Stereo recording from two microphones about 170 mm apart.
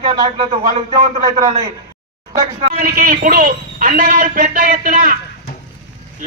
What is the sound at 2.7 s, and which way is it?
Speech, 55° right (ahead or behind).